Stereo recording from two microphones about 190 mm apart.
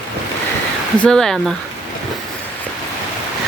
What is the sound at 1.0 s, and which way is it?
Speech, 5° left (ahead or behind).